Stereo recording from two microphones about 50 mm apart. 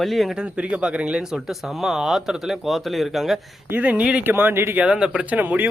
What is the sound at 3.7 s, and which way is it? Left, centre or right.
Speech, right.